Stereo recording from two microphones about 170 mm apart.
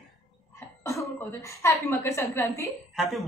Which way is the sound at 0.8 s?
15° left (ahead or behind).